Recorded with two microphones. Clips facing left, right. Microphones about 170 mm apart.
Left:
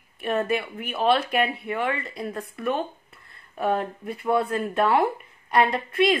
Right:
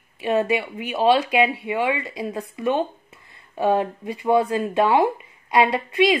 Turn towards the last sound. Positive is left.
turn(degrees=-15)  # may be behind; listen again after turning